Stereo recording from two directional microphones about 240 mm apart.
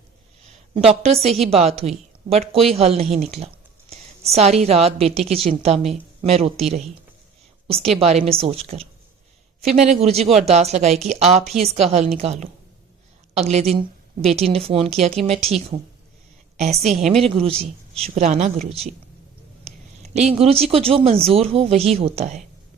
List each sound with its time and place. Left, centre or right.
0.5 s a sound: right
1.0 s a woman's voice: right
7.9 s a woman's voice: right
17.2 s a woman's voice: right
19.6 s a sound: right
20.3 s a woman's voice: right